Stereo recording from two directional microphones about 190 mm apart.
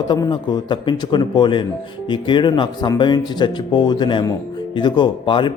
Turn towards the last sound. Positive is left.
turn(degrees=25)  # may be behind; listen again after turning